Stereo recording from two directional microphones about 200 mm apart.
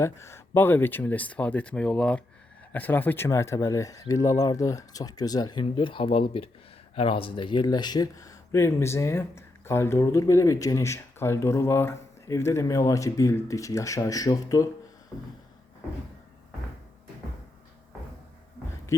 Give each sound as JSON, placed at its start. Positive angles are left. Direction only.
{"t": 0.0, "sound": "speech", "side_deg": 15}